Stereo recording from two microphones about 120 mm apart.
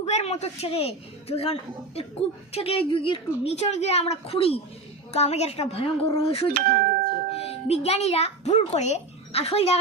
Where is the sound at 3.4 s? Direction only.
60° left (ahead or behind).